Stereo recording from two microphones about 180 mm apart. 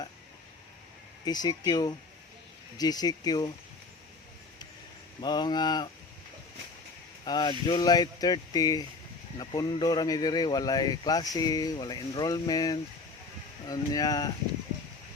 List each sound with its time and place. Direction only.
1.2 s speech: 20° left (ahead or behind)
5.2 s speech: 25° left (ahead or behind)
7.3 s speech: 25° left (ahead or behind)